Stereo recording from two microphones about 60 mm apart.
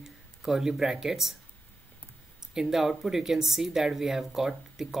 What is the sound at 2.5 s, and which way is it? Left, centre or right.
Speech, centre.